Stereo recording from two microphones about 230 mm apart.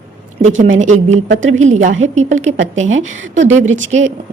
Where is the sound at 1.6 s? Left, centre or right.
Right.